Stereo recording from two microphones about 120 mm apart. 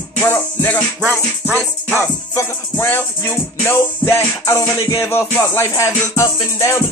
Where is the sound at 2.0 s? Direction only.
20° left (ahead or behind).